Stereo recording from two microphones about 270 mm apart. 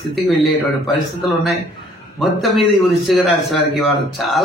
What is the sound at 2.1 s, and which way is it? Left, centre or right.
A man's voice, centre.